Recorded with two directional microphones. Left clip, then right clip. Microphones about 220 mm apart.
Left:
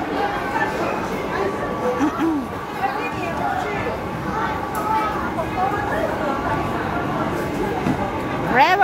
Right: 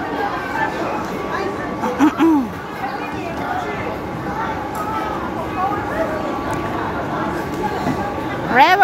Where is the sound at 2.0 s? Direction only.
25° right (ahead or behind).